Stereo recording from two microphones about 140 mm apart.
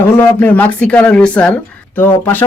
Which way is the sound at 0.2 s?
10° left (ahead or behind).